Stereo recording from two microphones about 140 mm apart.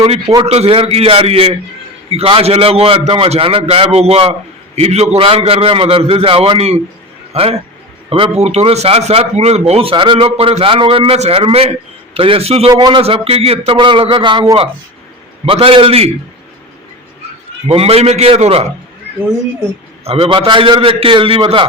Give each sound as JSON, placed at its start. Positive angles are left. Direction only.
{"t": 0.4, "sound": "a man's voice", "side_deg": -50}
{"t": 12.7, "sound": "a man's voice", "side_deg": -30}
{"t": 13.0, "sound": "a man's voice", "side_deg": -45}
{"t": 15.4, "sound": "a man's voice", "side_deg": -40}
{"t": 17.7, "sound": "a man's voice", "side_deg": -45}
{"t": 20.1, "sound": "a man's voice", "side_deg": -40}